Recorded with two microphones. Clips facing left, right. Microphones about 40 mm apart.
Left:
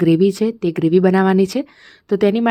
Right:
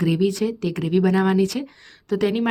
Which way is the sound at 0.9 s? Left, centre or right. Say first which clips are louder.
Left 4 dB; left.